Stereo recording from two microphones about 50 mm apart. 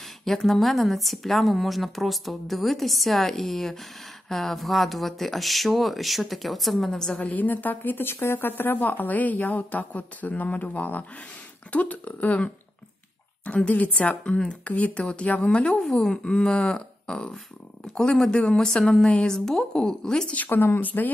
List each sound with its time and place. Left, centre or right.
0.2 s a woman's voice: centre
7.0 s a woman's voice: centre
7.2 s speech: left
13.7 s speech: left
15.9 s a woman's voice: centre
20.2 s speech: left